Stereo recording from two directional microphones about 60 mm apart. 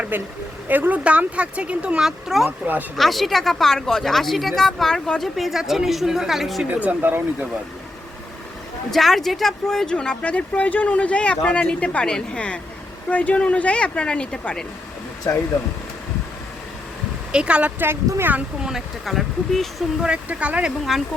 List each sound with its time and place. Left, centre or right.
0.1 s speech: right
2.0 s speech: centre
5.4 s speech: centre
6.7 s speech: right
8.9 s speech: centre
15.3 s speech: left
17.3 s speech: centre
17.7 s speech: right
18.6 s speech: centre
20.0 s speech: centre